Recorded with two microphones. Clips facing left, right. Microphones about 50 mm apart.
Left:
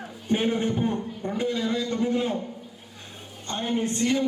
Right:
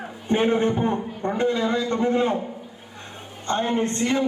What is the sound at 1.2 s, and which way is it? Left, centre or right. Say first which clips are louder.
Speech: right 6 dB; right.